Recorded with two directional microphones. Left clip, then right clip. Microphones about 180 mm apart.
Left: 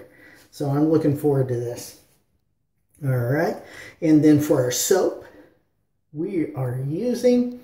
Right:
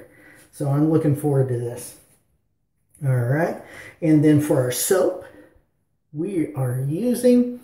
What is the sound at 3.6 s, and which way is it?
Speech, 10° left (ahead or behind).